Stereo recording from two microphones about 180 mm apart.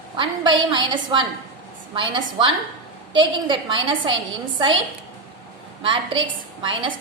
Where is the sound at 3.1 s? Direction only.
25° right (ahead or behind).